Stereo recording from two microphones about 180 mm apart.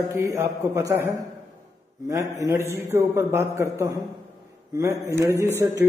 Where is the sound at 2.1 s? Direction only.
20° right (ahead or behind).